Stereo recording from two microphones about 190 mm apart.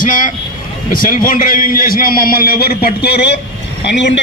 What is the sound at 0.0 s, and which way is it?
A man's voice, 45° left (ahead or behind).